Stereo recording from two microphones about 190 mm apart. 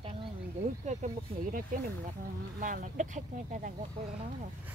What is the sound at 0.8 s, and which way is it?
Speech, 45° right (ahead or behind).